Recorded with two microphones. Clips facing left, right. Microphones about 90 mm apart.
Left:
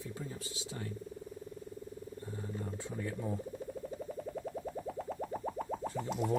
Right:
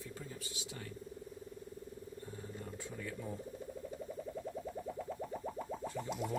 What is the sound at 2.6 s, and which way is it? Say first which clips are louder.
Speech: left 6 dB; 30° left (ahead or behind).